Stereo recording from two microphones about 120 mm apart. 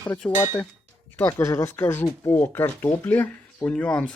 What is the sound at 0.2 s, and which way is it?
Speech, 15° left (ahead or behind).